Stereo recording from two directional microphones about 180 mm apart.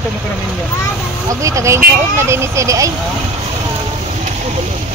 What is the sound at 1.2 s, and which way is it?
Speech, 15° right (ahead or behind).